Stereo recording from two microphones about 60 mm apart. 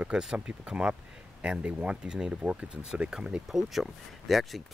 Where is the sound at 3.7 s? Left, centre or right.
Centre.